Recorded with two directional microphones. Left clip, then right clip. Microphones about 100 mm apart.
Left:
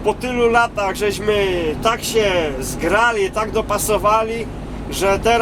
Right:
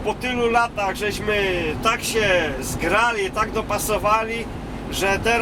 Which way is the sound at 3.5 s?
20° left (ahead or behind).